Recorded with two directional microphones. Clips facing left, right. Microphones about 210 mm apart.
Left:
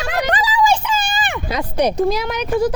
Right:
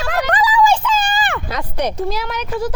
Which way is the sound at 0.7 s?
10° left (ahead or behind).